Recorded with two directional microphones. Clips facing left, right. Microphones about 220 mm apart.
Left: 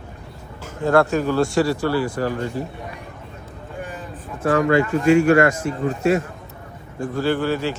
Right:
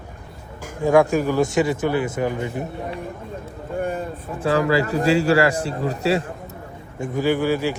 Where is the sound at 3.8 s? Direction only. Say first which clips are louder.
Right 8 dB; 55° right (ahead or behind).